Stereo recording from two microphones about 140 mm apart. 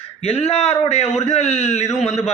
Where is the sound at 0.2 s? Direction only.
45° left (ahead or behind).